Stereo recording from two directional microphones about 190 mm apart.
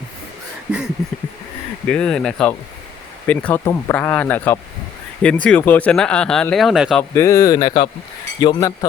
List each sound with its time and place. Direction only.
1.9 s speech: 5° left (ahead or behind)
7.1 s speech: 15° left (ahead or behind)